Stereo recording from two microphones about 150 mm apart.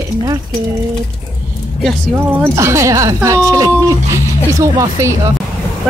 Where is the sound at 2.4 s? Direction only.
20° right (ahead or behind).